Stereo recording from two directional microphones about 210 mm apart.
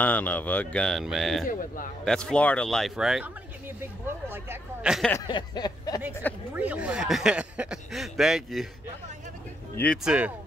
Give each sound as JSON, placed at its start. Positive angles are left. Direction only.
{"t": 0.0, "sound": "speech", "side_deg": 10}
{"t": 1.5, "sound": "a man's voice", "side_deg": 40}
{"t": 2.0, "sound": "speech", "side_deg": 5}
{"t": 5.1, "sound": "a sound", "side_deg": 20}
{"t": 6.5, "sound": "speech", "side_deg": -5}
{"t": 10.0, "sound": "speech", "side_deg": -5}